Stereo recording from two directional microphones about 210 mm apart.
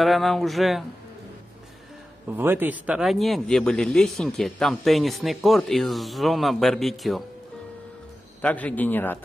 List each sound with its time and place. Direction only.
0.0 s speech: centre (ahead or behind)
2.2 s a man's voice: 10° right (ahead or behind)
8.4 s a man's voice: 5° left (ahead or behind)